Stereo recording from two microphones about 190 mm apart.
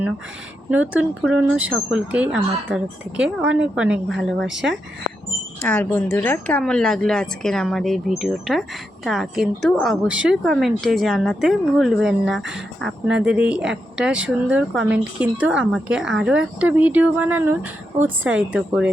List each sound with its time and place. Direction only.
0.7 s speech: 10° right (ahead or behind)
4.4 s speech: 70° right (ahead or behind)
5.6 s a woman's voice: 10° left (ahead or behind)